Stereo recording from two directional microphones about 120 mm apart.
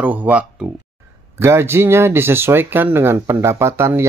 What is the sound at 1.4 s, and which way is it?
Speech, 20° right (ahead or behind).